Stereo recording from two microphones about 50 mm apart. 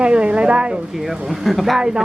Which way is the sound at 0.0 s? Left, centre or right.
Right.